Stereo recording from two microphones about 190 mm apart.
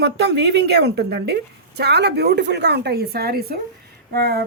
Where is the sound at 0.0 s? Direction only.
60° right (ahead or behind).